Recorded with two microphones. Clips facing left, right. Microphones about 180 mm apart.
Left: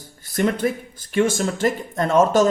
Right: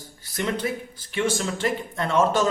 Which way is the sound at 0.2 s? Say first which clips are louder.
Left 6 dB; 50° left (ahead or behind).